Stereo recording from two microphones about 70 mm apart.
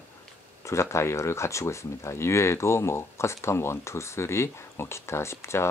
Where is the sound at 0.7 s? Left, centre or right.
Left.